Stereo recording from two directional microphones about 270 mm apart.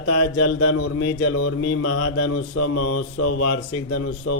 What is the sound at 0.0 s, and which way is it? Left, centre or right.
Speech, left.